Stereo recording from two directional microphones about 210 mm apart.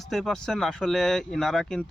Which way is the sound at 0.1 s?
Centre (ahead or behind).